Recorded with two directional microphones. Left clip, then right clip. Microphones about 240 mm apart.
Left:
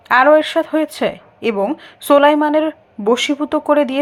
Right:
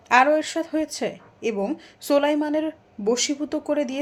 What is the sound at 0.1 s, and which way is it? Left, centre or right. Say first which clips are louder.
Speech: left 7 dB; centre.